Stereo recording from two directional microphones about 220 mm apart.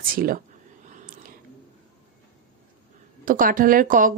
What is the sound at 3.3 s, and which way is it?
Speech, 40° right (ahead or behind).